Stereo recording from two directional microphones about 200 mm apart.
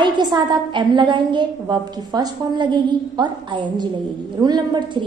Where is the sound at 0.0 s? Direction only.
20° right (ahead or behind).